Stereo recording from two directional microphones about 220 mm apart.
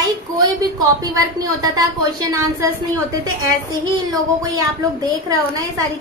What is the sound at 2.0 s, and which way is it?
Speech, 15° right (ahead or behind).